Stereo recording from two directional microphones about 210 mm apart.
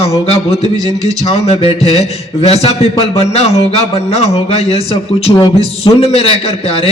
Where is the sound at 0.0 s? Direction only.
30° left (ahead or behind).